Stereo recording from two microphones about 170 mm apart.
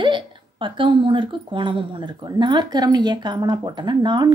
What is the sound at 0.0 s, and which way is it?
A woman's voice, 30° right (ahead or behind).